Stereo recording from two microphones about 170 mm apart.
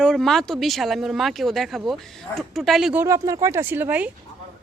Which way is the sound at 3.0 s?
20° right (ahead or behind).